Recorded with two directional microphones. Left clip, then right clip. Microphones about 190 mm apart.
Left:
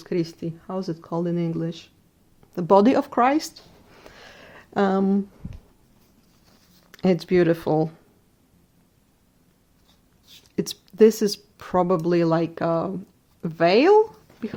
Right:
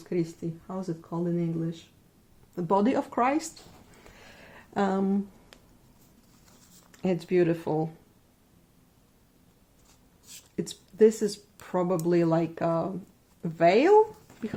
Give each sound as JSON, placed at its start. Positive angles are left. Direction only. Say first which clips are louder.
{"t": 0.0, "sound": "speech", "louder": "left 4 dB", "side_deg": 50}
{"t": 4.0, "sound": "a sound", "louder": "left 7 dB", "side_deg": 40}
{"t": 6.9, "sound": "speech", "louder": "left 6 dB", "side_deg": 45}
{"t": 10.5, "sound": "speech", "louder": "left 7 dB", "side_deg": 50}